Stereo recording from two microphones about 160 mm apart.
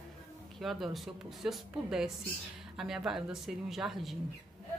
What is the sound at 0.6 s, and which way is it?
Speech, centre (ahead or behind).